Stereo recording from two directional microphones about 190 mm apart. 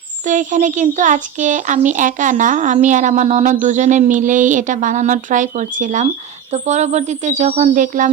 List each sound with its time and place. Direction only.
0.3 s a child's voice: 40° right (ahead or behind)